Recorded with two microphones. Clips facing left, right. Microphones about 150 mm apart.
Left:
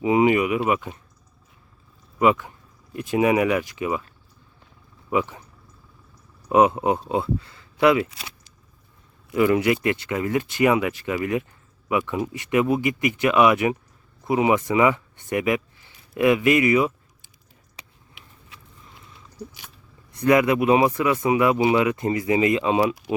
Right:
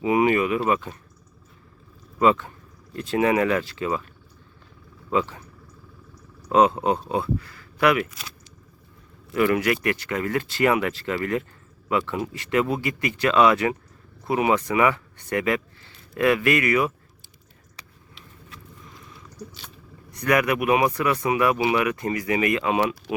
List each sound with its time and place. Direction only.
0.0 s speech: 20° left (ahead or behind)
2.1 s speech: 10° left (ahead or behind)
5.1 s speech: 15° left (ahead or behind)
6.5 s speech: 20° left (ahead or behind)
9.3 s speech: 15° left (ahead or behind)
20.1 s speech: 25° left (ahead or behind)
23.1 s speech: 10° left (ahead or behind)